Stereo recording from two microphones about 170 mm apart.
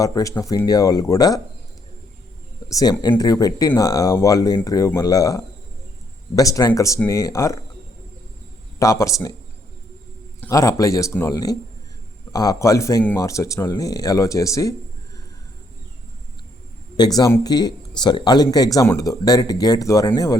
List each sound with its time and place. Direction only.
0.0 s speech: 20° left (ahead or behind)
2.6 s speech: 20° left (ahead or behind)
8.8 s speech: 20° left (ahead or behind)
10.4 s speech: 20° left (ahead or behind)
17.2 s speech: 20° left (ahead or behind)